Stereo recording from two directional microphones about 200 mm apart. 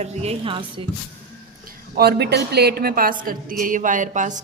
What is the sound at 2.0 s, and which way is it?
Speech, 50° right (ahead or behind).